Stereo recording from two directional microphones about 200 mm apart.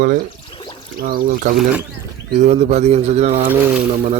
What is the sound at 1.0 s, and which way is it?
Speech, 45° right (ahead or behind).